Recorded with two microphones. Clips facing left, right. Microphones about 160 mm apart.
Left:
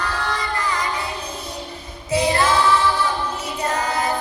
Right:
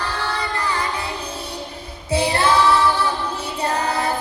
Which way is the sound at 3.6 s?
30° right (ahead or behind).